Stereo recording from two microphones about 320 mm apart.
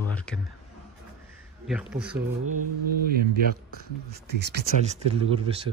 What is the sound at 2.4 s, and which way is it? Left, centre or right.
Mantra, right.